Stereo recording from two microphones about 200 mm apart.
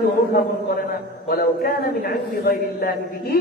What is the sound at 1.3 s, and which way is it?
A man's voice, 50° left (ahead or behind).